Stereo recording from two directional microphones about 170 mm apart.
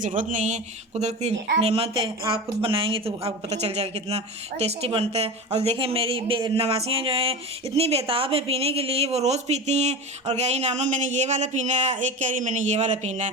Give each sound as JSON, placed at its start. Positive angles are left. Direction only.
{"t": 0.0, "sound": "speech", "side_deg": -50}